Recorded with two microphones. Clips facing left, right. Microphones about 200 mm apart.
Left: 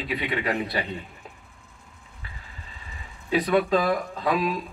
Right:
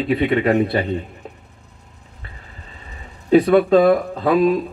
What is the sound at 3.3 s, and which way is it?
Speech, 30° right (ahead or behind).